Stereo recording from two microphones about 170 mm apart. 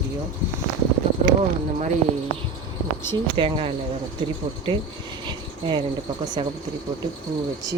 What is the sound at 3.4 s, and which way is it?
Speech, 30° right (ahead or behind).